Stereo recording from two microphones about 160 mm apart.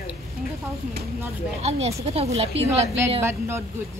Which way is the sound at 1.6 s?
40° right (ahead or behind).